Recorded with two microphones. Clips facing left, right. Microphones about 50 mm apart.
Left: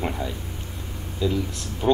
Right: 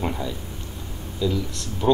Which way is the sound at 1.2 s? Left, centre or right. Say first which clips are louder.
Even; left.